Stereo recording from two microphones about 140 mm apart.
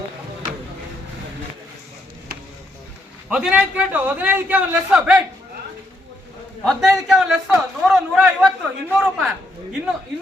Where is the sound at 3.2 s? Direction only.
5° right (ahead or behind).